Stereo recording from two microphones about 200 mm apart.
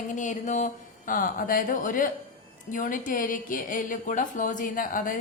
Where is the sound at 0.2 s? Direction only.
35° left (ahead or behind).